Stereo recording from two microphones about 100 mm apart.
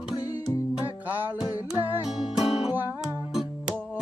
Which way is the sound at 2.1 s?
5° right (ahead or behind).